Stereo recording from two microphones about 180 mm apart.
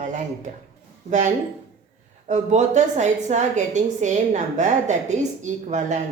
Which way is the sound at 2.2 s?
40° right (ahead or behind).